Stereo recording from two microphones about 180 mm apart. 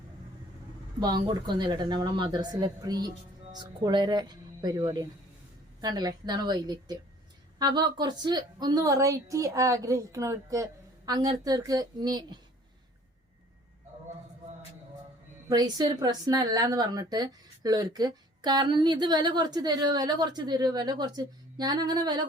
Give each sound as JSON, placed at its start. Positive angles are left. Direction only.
{"t": 0.9, "sound": "a woman's voice", "side_deg": -20}
{"t": 15.4, "sound": "a woman's voice", "side_deg": -20}